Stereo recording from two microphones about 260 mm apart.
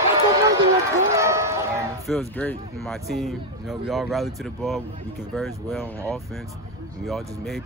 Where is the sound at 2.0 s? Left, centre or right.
Centre.